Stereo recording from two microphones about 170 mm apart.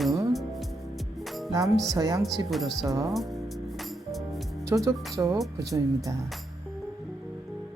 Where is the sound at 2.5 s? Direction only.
Centre (ahead or behind).